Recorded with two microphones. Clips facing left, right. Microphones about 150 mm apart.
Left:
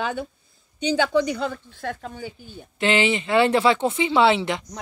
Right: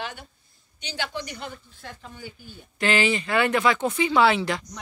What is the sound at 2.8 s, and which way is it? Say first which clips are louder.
Speech: left 2 dB; 25° left (ahead or behind).